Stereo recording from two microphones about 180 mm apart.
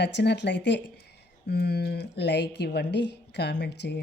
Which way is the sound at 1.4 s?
65° left (ahead or behind).